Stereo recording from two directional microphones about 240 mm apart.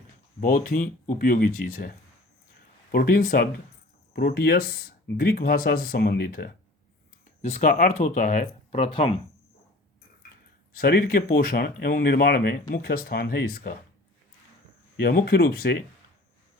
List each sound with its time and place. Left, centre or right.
0.3 s speech: left
10.8 s speech: left
14.9 s speech: left